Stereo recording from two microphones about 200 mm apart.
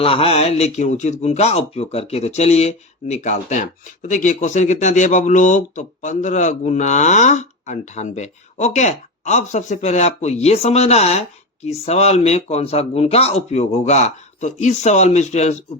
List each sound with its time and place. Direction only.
0.0 s speech: 30° left (ahead or behind)